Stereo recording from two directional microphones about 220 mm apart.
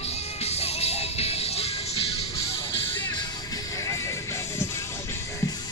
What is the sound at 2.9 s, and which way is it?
Music, 10° left (ahead or behind).